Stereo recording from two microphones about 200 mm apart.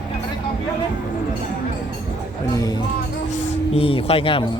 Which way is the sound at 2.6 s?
20° left (ahead or behind).